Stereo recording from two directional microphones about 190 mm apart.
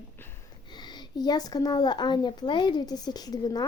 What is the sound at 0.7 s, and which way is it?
A woman's voice, 25° left (ahead or behind).